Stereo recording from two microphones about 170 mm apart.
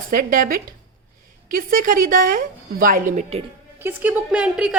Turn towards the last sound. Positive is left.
turn(degrees=-5)  # may be behind; listen again after turning